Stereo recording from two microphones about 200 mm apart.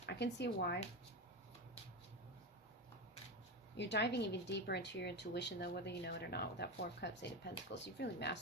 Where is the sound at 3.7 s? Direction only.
60° left (ahead or behind).